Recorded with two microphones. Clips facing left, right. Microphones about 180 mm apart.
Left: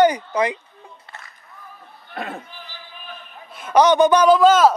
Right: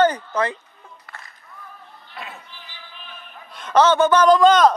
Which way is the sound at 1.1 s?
25° left (ahead or behind).